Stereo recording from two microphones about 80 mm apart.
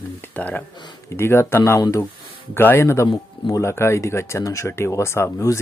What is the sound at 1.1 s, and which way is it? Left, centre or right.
Speech, left.